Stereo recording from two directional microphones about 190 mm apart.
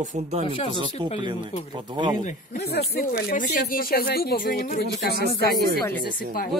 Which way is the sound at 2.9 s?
55° left (ahead or behind).